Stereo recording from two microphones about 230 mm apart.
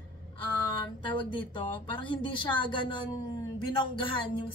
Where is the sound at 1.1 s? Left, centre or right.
Left.